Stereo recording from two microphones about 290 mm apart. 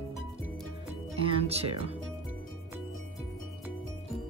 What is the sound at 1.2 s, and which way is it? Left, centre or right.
Music, centre.